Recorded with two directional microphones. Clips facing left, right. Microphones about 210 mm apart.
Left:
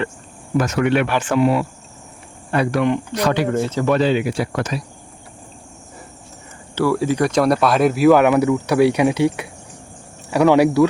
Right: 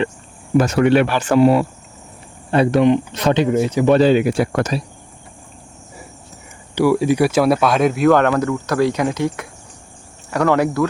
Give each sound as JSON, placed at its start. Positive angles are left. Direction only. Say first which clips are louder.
{"t": 0.5, "sound": "speech", "louder": "right 4 dB", "side_deg": -30}
{"t": 2.5, "sound": "speech", "louder": "right 4 dB", "side_deg": -25}
{"t": 3.5, "sound": "speech", "louder": "right 4 dB", "side_deg": -10}
{"t": 3.9, "sound": "speech", "louder": "right 5 dB", "side_deg": -40}
{"t": 6.7, "sound": "speech", "louder": "right 3 dB", "side_deg": -15}